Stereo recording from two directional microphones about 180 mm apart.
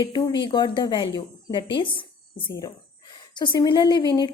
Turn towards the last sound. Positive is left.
turn(degrees=20)  # may be behind; listen again after turning